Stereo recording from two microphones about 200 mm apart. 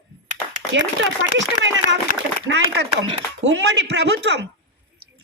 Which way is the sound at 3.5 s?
60° right (ahead or behind).